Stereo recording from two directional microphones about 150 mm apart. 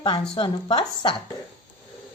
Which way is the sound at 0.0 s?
35° left (ahead or behind).